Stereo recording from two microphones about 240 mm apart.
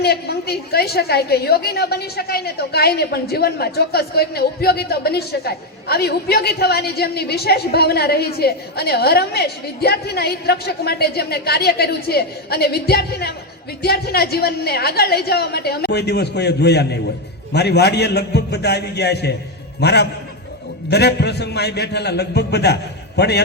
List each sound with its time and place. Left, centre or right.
0.0 s a woman's voice: left